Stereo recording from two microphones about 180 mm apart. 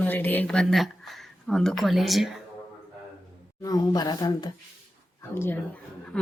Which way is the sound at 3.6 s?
20° left (ahead or behind).